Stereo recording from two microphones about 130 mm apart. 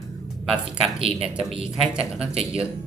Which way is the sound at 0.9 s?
45° right (ahead or behind).